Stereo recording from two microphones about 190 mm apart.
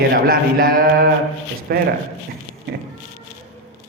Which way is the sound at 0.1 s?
50° right (ahead or behind).